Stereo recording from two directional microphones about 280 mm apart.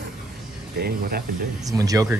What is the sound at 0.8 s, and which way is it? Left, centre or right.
Speech, right.